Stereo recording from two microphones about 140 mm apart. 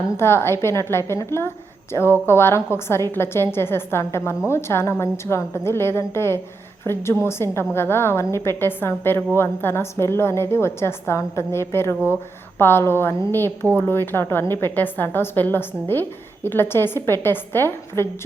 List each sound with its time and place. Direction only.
0.2 s a woman's voice: 20° left (ahead or behind)